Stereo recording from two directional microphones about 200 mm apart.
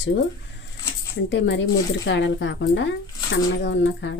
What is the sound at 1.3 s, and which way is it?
Speech, 65° left (ahead or behind).